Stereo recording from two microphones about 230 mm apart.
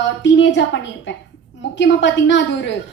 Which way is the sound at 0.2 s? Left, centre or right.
Left.